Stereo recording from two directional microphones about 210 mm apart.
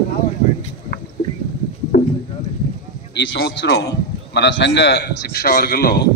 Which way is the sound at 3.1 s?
55° left (ahead or behind).